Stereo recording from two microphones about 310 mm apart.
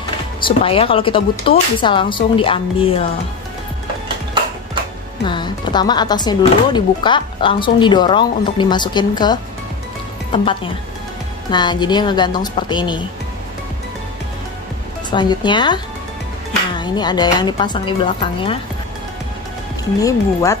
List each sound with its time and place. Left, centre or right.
0.5 s speech: centre
5.2 s speech: centre
11.5 s speech: centre
15.0 s speech: centre
19.8 s speech: centre